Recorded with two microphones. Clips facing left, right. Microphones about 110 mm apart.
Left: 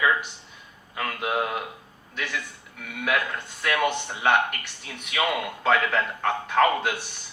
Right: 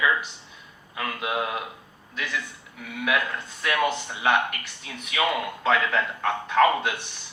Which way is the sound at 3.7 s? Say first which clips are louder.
Even; 30° right (ahead or behind).